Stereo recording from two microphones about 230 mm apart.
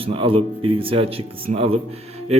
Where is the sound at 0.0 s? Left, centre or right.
Right.